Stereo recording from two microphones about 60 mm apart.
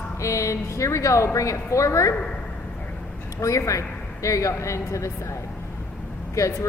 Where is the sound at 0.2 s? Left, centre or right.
Left.